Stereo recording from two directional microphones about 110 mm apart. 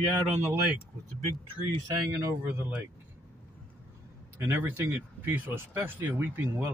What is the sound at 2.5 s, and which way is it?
Speech, 15° right (ahead or behind).